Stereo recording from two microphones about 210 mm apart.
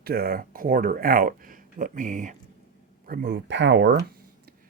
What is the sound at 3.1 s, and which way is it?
Speech, 55° right (ahead or behind).